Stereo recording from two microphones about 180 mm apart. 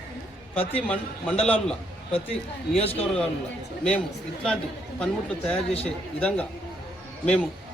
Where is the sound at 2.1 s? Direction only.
35° left (ahead or behind).